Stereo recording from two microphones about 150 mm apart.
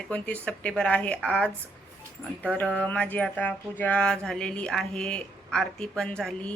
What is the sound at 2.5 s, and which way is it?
Speech, 5° left (ahead or behind).